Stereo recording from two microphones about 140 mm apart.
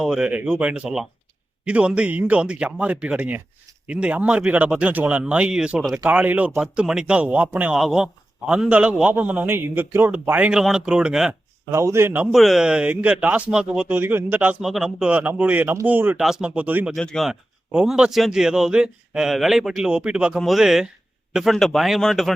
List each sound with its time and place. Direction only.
0.0 s speech: 5° right (ahead or behind)
11.7 s speech: 20° right (ahead or behind)
16.9 s a man's voice: 5° left (ahead or behind)
17.7 s a man's voice: 5° right (ahead or behind)